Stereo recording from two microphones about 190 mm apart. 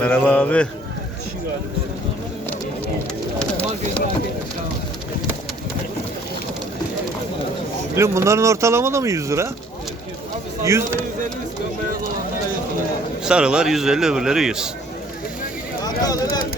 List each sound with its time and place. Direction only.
0.0 s a man's voice: 5° left (ahead or behind)
3.3 s bird: 5° left (ahead or behind)
7.9 s speech: 15° right (ahead or behind)
10.7 s speech: 15° right (ahead or behind)
13.2 s a man's voice: 5° right (ahead or behind)
15.8 s a sound: 20° left (ahead or behind)